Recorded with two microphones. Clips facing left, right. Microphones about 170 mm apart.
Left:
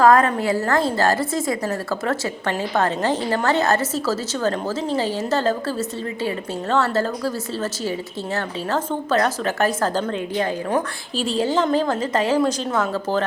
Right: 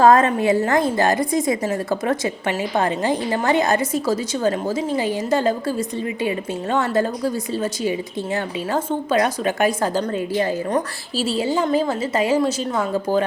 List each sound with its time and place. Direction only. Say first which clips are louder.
0.0 s a woman's voice: right 1 dB; 20° right (ahead or behind)